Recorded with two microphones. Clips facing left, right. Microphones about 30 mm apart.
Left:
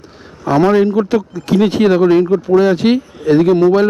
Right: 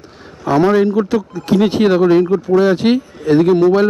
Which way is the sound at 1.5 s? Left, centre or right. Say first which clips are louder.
Left 1 dB; centre.